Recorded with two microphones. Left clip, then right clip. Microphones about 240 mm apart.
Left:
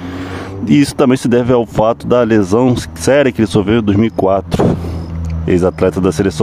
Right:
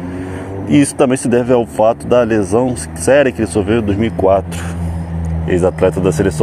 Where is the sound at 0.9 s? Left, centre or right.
Left.